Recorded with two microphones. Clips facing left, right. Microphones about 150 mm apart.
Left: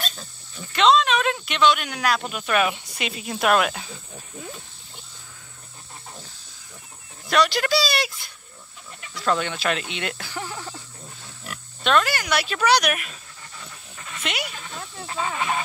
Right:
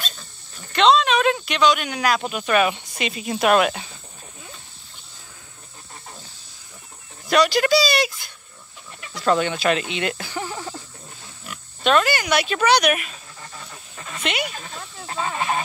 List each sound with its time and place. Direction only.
0.7 s speech: centre (ahead or behind)
7.2 s speech: centre (ahead or behind)
9.2 s speech: 5° right (ahead or behind)
14.3 s speech: centre (ahead or behind)
15.0 s speech: 30° right (ahead or behind)